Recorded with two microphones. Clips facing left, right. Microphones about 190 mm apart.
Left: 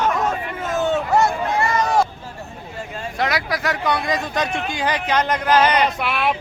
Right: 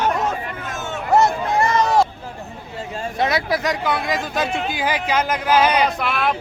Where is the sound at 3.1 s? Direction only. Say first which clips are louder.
Right 2 dB; 25° right (ahead or behind).